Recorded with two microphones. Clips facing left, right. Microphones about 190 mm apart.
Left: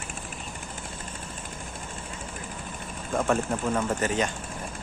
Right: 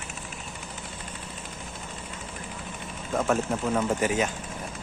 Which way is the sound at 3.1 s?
5° right (ahead or behind).